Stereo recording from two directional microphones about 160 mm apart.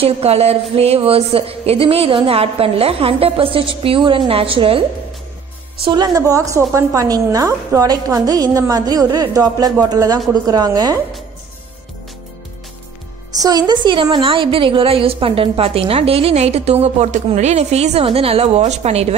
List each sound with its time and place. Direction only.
0.0 s a woman's voice: 40° right (ahead or behind); by 11.0 s 25° right (ahead or behind)
13.4 s a woman's voice: 25° right (ahead or behind); by 19.1 s 40° right (ahead or behind)